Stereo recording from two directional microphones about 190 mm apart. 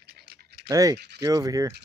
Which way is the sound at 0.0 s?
60° right (ahead or behind).